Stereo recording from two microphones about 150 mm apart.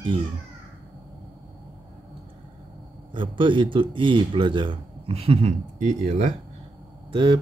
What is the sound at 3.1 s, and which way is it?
A man's voice, 35° right (ahead or behind).